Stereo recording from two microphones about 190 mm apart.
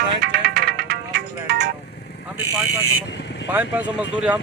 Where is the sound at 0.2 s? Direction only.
60° right (ahead or behind).